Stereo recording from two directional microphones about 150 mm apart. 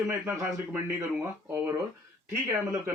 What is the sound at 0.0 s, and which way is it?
Speech, 15° right (ahead or behind).